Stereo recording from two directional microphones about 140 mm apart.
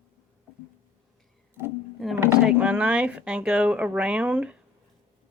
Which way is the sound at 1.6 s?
15° right (ahead or behind).